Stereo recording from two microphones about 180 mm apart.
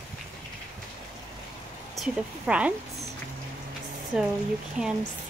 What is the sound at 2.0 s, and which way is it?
Speech, 5° right (ahead or behind).